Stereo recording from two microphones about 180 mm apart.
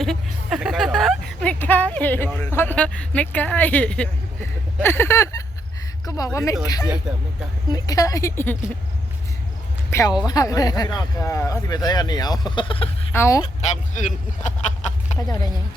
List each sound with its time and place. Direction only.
0.0 s a sound: centre (ahead or behind)
1.6 s a woman's voice: 10° left (ahead or behind)
9.9 s speech: 20° left (ahead or behind)
13.1 s a woman's voice: 15° left (ahead or behind)
13.4 s speech: 40° left (ahead or behind)